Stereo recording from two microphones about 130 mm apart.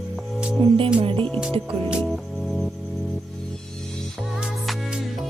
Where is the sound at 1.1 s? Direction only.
15° left (ahead or behind).